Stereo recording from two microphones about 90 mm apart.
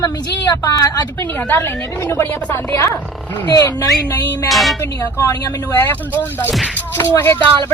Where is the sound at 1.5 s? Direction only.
25° left (ahead or behind).